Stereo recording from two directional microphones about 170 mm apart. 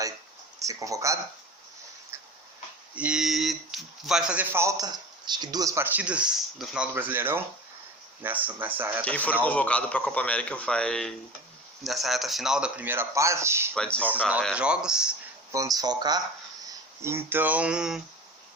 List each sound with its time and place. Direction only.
0.6 s speech: 20° right (ahead or behind)
2.9 s speech: 5° right (ahead or behind)
9.0 s a man's voice: 10° left (ahead or behind); by 13.7 s 15° right (ahead or behind)
13.7 s a man's voice: 5° left (ahead or behind)
14.5 s speech: 5° right (ahead or behind)
15.5 s speech: 20° right (ahead or behind); by 18.0 s 5° right (ahead or behind)